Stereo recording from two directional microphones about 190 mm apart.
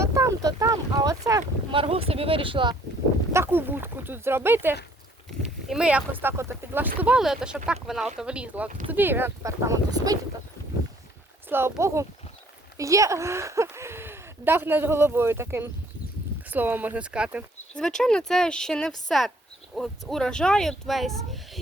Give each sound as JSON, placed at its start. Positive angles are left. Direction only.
{"t": 0.0, "sound": "a sound", "side_deg": -15}
{"t": 3.3, "sound": "speech", "side_deg": -10}
{"t": 11.4, "sound": "speech", "side_deg": -10}